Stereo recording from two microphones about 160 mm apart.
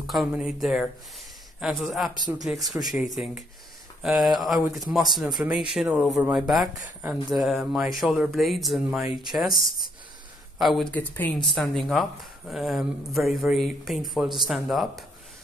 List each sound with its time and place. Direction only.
0.0 s speech: centre (ahead or behind)
2.1 s speech: 25° right (ahead or behind)
2.4 s speech: centre (ahead or behind)
10.6 s speech: centre (ahead or behind)
10.9 s speech: 10° left (ahead or behind)